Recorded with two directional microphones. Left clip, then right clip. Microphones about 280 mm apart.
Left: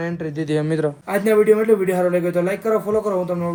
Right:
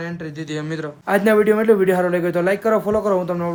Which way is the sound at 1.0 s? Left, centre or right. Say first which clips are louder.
Right 1 dB; right.